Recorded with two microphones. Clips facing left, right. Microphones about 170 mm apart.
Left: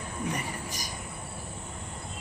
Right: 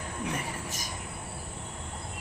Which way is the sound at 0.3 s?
Centre (ahead or behind).